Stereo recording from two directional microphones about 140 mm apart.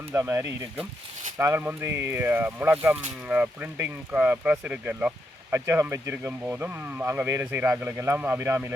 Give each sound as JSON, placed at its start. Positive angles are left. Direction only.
{"t": 0.1, "sound": "speech", "side_deg": -20}